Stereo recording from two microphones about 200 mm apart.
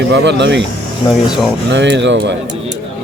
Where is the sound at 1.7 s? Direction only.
60° right (ahead or behind).